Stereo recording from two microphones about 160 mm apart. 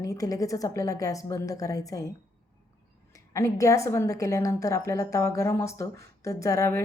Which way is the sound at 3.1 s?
20° left (ahead or behind).